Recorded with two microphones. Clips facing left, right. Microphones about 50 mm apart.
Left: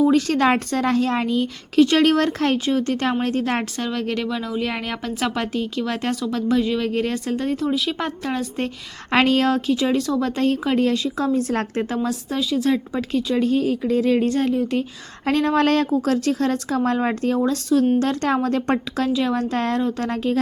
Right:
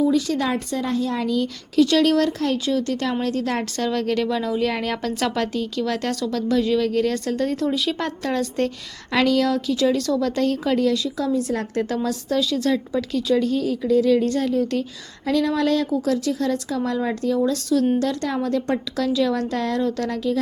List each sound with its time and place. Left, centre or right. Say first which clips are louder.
0.0 s speech: left 3 dB; left
1.1 s a woman's voice: left 1 dB; left
3.8 s speech: right 2 dB; centre
7.6 s speech: even; centre
9.1 s a woman's voice: left 2 dB; left
9.7 s a woman's voice: even; left
12.9 s a woman's voice: right 1 dB; left
15.3 s a woman's voice: left 2 dB; left